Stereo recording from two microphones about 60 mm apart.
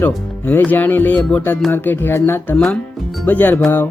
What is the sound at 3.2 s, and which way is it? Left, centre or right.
Speech, left.